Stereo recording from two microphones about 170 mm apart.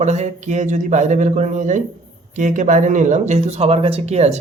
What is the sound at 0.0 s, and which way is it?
Speech, 40° right (ahead or behind).